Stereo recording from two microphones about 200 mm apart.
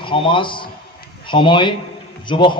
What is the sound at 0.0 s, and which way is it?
A man's voice, 25° left (ahead or behind).